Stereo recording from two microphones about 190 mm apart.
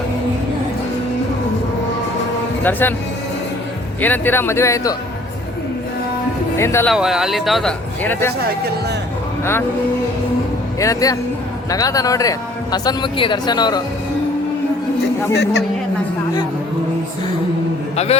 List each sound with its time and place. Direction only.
2.6 s speech: 10° left (ahead or behind)
4.0 s speech: 10° left (ahead or behind)
6.6 s speech: 15° left (ahead or behind)
6.8 s speech: centre (ahead or behind)
9.4 s speech: 10° left (ahead or behind)
10.8 s a man's voice: 15° left (ahead or behind)
15.3 s a man's voice: 65° left (ahead or behind)
17.9 s a man's voice: 35° left (ahead or behind)